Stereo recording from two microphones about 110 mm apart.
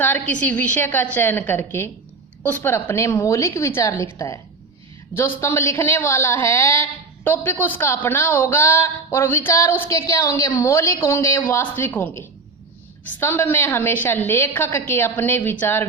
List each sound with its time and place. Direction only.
0.0 s a woman's voice: 15° left (ahead or behind)